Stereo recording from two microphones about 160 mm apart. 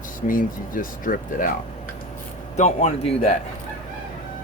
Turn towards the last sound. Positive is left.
turn(degrees=40)  # may be behind; listen again after turning